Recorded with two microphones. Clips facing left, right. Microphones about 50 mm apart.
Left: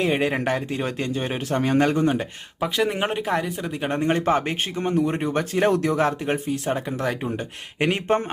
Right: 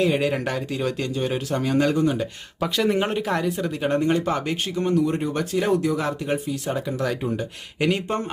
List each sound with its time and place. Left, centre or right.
0.0 s speech: left
2.6 s speech: centre
4.0 s speech: left
5.7 s speech: left